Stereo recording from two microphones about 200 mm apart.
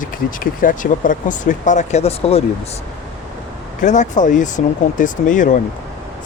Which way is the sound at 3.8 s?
40° left (ahead or behind).